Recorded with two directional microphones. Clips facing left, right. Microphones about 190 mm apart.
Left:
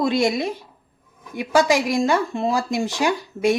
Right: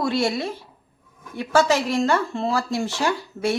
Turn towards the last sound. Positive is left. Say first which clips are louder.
# left 3 dB
turn(degrees=15)  # may be behind; listen again after turning